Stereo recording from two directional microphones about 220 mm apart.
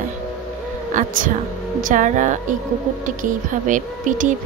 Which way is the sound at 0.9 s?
35° right (ahead or behind).